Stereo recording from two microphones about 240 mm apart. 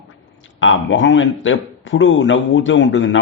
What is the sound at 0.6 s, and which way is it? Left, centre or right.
A man's voice, left.